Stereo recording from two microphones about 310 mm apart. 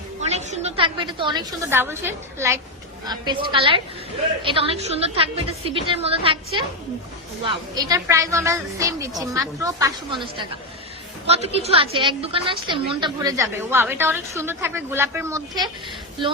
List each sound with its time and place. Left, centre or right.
0.2 s a woman's voice: right
7.8 s a woman's voice: centre
11.4 s a woman's voice: centre